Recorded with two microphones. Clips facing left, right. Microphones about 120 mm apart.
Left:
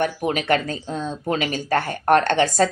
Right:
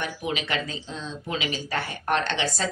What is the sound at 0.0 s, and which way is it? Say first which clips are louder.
Speech: left 7 dB; 50° left (ahead or behind).